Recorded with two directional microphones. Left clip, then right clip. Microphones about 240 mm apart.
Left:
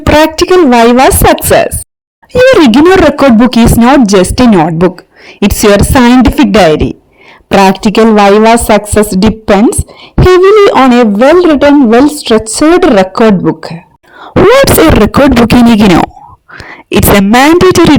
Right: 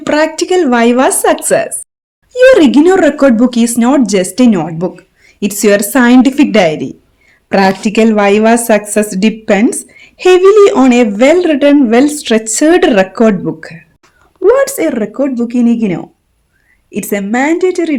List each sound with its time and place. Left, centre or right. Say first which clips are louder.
0.0 s a woman's voice: left 6 dB; left
14.5 s speech: left 8 dB; left
17.3 s speech: left 6 dB; left